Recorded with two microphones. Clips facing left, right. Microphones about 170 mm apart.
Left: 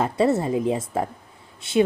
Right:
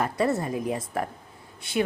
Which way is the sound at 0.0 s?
25° left (ahead or behind).